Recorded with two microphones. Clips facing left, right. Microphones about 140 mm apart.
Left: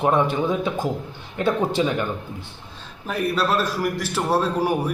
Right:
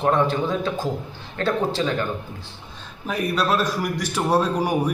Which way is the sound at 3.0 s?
5° left (ahead or behind).